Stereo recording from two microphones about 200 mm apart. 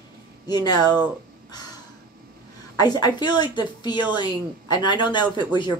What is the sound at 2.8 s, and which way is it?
Speech, 20° left (ahead or behind).